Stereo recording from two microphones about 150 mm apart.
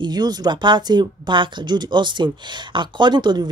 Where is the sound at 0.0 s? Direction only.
25° right (ahead or behind).